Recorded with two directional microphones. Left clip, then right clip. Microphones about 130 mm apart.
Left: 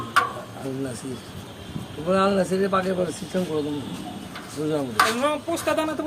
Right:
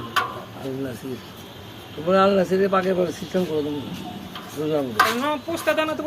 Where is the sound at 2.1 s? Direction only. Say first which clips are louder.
Right 3 dB; 15° right (ahead or behind).